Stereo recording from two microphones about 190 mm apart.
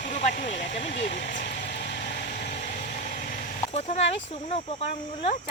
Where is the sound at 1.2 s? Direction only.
40° left (ahead or behind).